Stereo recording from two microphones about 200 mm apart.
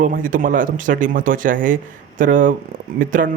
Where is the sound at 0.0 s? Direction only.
45° right (ahead or behind).